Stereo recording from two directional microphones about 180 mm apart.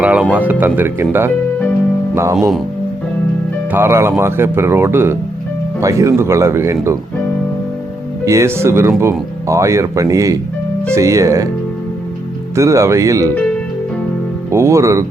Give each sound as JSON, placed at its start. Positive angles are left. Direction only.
{"t": 0.0, "sound": "speech", "side_deg": -5}
{"t": 3.7, "sound": "speech", "side_deg": -15}
{"t": 8.2, "sound": "speech", "side_deg": -15}
{"t": 12.5, "sound": "speech", "side_deg": -15}
{"t": 14.5, "sound": "speech", "side_deg": -15}